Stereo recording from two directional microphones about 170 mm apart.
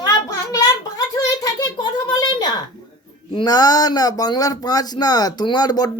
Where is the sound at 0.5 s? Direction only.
20° left (ahead or behind).